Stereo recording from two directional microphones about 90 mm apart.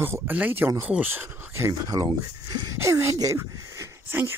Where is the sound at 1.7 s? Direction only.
45° right (ahead or behind).